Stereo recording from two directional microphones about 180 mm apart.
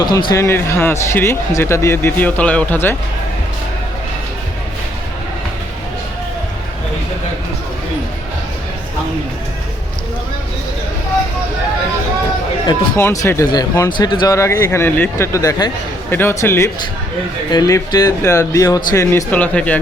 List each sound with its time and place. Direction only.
0.0 s speech: 25° left (ahead or behind)
0.4 s speech: 10° left (ahead or behind)
13.0 s speech: 15° left (ahead or behind)